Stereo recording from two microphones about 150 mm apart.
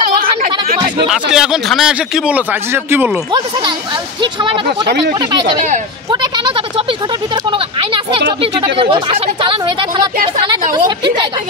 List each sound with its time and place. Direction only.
0.2 s a sound: 75° right (ahead or behind)
1.0 s a man's voice: 5° right (ahead or behind)
4.2 s speech: 35° right (ahead or behind)
4.6 s speech: 90° right
6.3 s a woman's voice: 30° right (ahead or behind)